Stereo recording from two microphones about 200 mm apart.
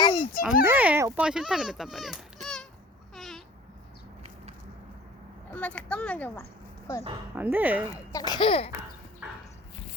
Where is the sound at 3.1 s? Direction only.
Centre (ahead or behind).